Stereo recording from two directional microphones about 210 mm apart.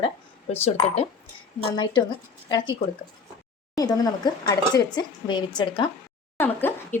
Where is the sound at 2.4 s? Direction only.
20° left (ahead or behind).